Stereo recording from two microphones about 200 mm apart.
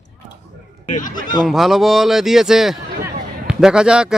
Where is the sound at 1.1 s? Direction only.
20° left (ahead or behind).